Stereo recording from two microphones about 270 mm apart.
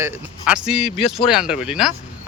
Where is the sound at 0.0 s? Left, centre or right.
Centre.